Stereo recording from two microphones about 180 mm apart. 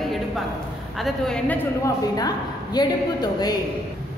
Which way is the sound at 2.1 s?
20° left (ahead or behind).